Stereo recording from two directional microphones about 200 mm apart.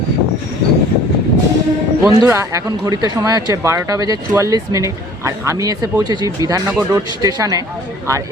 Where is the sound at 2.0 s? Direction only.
15° right (ahead or behind).